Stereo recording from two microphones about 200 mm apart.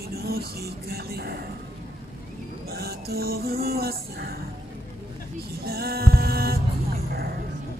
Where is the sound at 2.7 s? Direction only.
50° right (ahead or behind).